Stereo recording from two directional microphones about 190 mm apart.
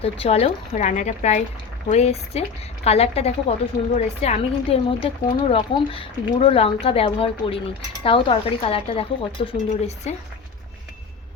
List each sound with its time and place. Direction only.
0.0 s a woman's voice: 30° left (ahead or behind)